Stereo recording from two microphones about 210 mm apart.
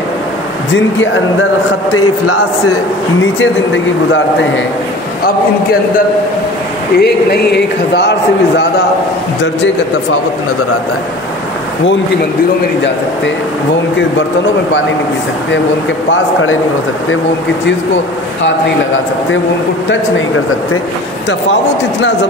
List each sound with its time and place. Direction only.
2.0 s a man's voice: 90° left
3.3 s speech: 60° left (ahead or behind)
7.0 s speech: 50° left (ahead or behind)
19.9 s speech: 70° left (ahead or behind)